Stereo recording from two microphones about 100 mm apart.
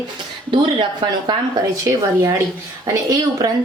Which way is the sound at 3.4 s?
40° right (ahead or behind).